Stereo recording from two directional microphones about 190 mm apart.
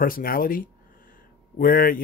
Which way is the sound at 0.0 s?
50° left (ahead or behind).